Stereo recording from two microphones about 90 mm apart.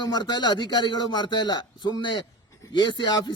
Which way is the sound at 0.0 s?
55° left (ahead or behind).